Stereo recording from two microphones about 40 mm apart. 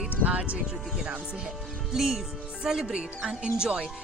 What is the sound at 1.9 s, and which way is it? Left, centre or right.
Speech, centre.